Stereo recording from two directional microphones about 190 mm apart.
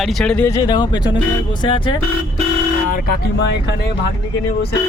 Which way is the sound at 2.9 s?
50° left (ahead or behind).